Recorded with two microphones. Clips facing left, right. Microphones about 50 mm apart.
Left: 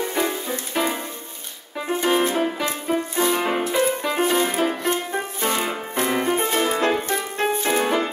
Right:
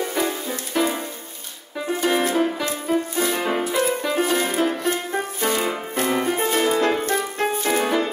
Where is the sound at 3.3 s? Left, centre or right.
Centre.